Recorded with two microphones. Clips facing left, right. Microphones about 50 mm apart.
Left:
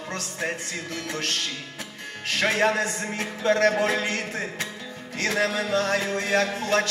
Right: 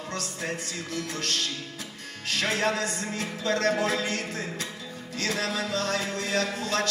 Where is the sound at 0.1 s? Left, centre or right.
Left.